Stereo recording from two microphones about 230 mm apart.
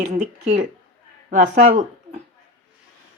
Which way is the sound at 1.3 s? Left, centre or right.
Right.